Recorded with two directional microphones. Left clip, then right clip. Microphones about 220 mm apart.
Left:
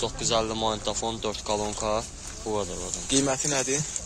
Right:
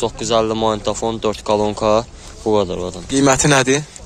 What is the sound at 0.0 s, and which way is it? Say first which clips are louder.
Speech: right 9 dB; 50° right (ahead or behind).